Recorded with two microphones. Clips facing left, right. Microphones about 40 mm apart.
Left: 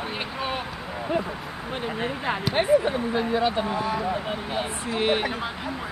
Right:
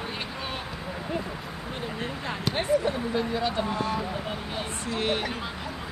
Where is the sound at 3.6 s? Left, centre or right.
Centre.